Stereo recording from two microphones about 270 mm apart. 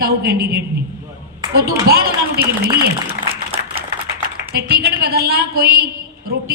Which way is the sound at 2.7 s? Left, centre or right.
Right.